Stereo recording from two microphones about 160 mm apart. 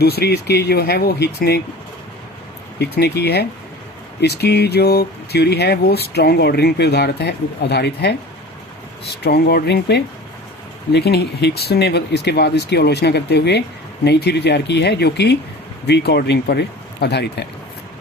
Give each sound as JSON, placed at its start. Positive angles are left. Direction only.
{"t": 0.0, "sound": "speech", "side_deg": 90}
{"t": 2.7, "sound": "speech", "side_deg": 90}